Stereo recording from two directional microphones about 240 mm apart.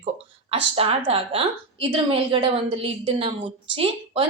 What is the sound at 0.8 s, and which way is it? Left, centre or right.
A woman's voice, right.